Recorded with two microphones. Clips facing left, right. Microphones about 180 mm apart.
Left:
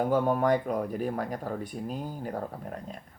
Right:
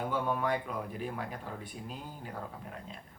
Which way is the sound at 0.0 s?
45° left (ahead or behind).